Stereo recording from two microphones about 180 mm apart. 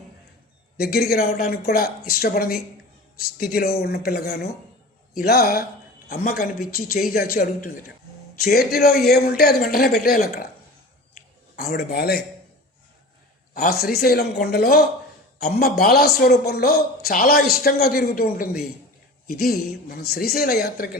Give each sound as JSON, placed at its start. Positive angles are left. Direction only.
{"t": 0.8, "sound": "a woman's voice", "side_deg": 60}
{"t": 11.5, "sound": "a woman's voice", "side_deg": 60}
{"t": 13.5, "sound": "a woman's voice", "side_deg": 55}